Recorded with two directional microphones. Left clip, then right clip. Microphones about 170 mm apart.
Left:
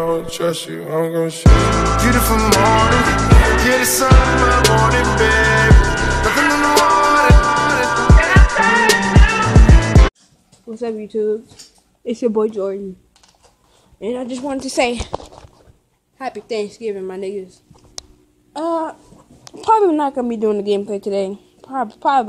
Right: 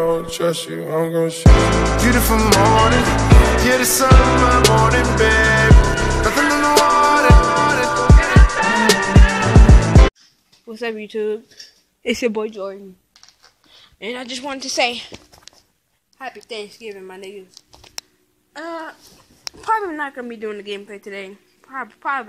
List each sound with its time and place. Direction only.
0.0 s music: centre (ahead or behind)
10.8 s speech: 30° right (ahead or behind)
12.4 s a woman's voice: 5° left (ahead or behind)
13.9 s speech: 15° right (ahead or behind)
14.5 s a woman's voice: centre (ahead or behind)
16.2 s speech: 10° left (ahead or behind)
16.4 s a woman's voice: centre (ahead or behind)
18.6 s a woman's voice: 5° left (ahead or behind)
19.4 s speech: 10° right (ahead or behind)
20.5 s speech: 55° left (ahead or behind)
20.8 s a woman's voice: 5° left (ahead or behind)